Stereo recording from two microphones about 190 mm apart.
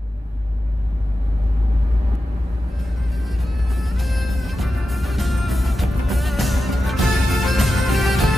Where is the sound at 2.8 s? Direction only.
Centre (ahead or behind).